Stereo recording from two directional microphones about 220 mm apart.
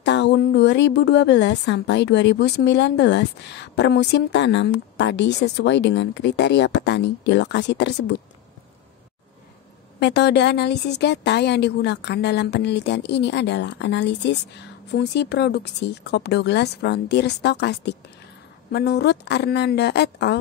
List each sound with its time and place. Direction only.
0.0 s a woman's voice: 50° left (ahead or behind)
9.9 s a woman's voice: 50° left (ahead or behind)